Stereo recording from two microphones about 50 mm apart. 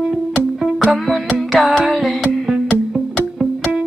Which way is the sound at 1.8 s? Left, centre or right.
Centre.